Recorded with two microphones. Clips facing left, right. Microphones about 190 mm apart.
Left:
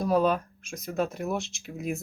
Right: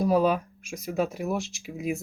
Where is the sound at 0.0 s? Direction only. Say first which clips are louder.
Right 2 dB; 5° right (ahead or behind).